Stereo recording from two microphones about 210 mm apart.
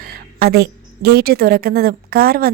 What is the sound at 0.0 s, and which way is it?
A woman's voice, 45° right (ahead or behind).